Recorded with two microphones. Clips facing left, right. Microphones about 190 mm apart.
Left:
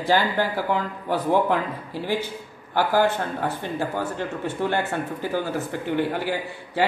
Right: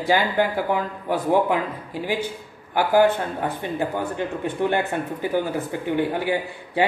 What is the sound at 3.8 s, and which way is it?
Speech, 15° right (ahead or behind).